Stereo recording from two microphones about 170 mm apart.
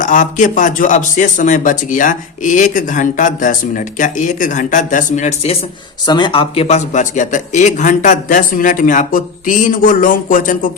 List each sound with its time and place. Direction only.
0.0 s speech: 50° left (ahead or behind)
6.1 s speech: 25° left (ahead or behind); by 10.7 s 50° left (ahead or behind)